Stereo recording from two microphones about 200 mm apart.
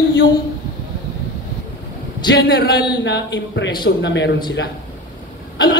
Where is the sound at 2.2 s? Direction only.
55° left (ahead or behind).